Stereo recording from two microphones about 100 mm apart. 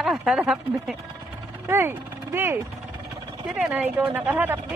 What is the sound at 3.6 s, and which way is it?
Speech, 5° right (ahead or behind).